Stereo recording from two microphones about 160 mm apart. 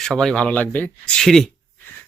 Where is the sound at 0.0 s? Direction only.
5° left (ahead or behind).